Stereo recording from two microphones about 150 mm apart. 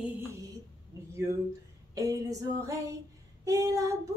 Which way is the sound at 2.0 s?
25° right (ahead or behind).